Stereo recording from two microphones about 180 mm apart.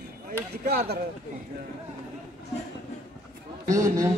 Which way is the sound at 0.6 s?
60° right (ahead or behind).